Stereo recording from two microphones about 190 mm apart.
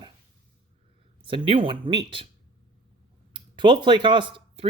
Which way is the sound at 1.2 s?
25° right (ahead or behind).